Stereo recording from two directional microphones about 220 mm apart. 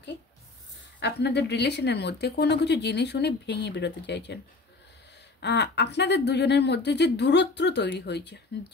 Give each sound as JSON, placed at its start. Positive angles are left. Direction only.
{"t": 0.9, "sound": "speech", "side_deg": 50}
{"t": 5.4, "sound": "speech", "side_deg": 50}